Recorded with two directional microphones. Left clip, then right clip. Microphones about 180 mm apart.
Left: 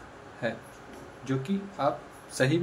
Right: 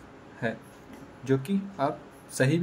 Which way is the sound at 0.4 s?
35° right (ahead or behind).